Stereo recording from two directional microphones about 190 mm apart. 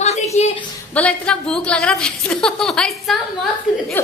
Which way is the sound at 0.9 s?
5° left (ahead or behind).